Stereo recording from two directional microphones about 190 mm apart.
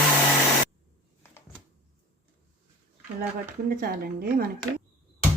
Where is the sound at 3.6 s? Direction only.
50° right (ahead or behind).